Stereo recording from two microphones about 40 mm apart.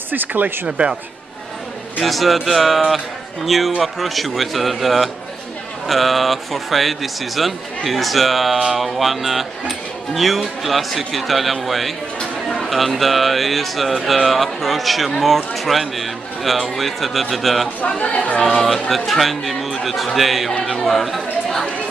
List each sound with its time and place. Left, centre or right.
0.1 s speech: right
0.7 s a man's voice: right
2.0 s speech: centre
17.8 s speech: left
18.6 s speech: centre